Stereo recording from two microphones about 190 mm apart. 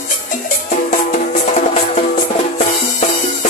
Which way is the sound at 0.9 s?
40° left (ahead or behind).